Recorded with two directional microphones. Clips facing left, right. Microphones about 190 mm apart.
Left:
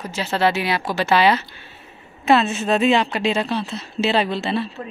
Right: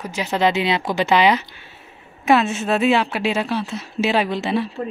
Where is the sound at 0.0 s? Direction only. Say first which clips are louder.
Right 1 dB; 15° right (ahead or behind).